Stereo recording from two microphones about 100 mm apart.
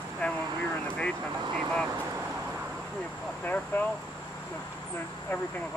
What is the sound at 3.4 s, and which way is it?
Speech, 15° left (ahead or behind).